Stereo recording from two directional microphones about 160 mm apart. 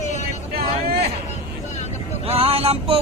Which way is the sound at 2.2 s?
35° right (ahead or behind).